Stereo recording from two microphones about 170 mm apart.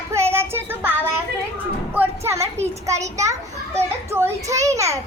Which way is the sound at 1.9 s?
15° right (ahead or behind).